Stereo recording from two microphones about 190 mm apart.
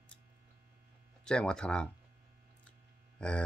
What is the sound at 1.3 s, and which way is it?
Speech, 5° left (ahead or behind).